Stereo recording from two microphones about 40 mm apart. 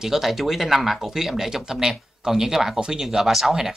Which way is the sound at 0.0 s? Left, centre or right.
Centre.